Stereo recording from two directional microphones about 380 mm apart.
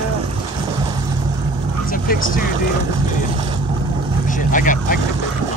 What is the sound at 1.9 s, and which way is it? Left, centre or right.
Speech, left.